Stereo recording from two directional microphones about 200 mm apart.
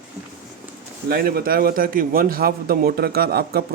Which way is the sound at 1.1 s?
50° right (ahead or behind).